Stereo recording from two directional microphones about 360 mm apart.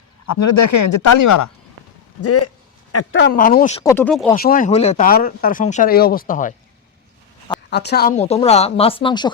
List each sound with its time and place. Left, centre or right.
0.3 s speech: left
2.2 s speech: left; by 4.4 s centre
4.4 s speech: left
7.7 s speech: left